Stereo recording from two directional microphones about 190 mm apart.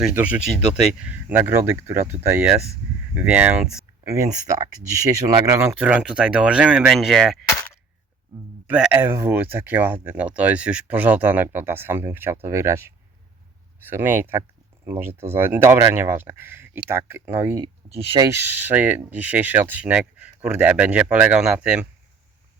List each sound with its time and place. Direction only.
0.1 s speech: 10° right (ahead or behind)
8.6 s speech: 5° right (ahead or behind)
13.9 s speech: 10° right (ahead or behind)
17.6 s speech: 30° right (ahead or behind)
18.2 s speech: 10° right (ahead or behind)